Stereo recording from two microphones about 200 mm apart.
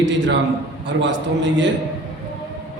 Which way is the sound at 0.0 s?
65° right (ahead or behind).